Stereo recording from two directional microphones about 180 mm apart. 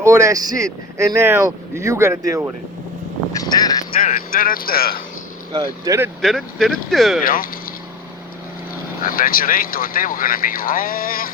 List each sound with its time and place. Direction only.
0.0 s speech: 15° right (ahead or behind)
3.4 s speech: 20° left (ahead or behind)
4.0 s speech: 50° left (ahead or behind)
5.5 s speech: 20° right (ahead or behind)
6.2 s speech: centre (ahead or behind)
7.3 s speech: 50° left (ahead or behind)
9.0 s speech: 50° left (ahead or behind)